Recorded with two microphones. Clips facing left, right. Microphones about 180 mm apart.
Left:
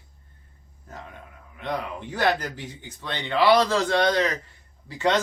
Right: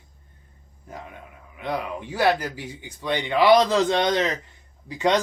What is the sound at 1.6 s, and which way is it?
A man's voice, 10° right (ahead or behind).